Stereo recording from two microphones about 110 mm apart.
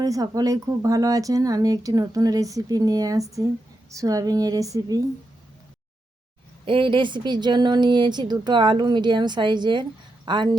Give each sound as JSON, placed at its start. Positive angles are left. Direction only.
{"t": 0.0, "sound": "speech", "side_deg": -35}
{"t": 6.7, "sound": "a woman's voice", "side_deg": -50}